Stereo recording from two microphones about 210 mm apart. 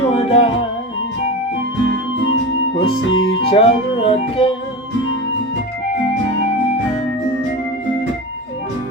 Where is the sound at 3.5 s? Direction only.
25° left (ahead or behind).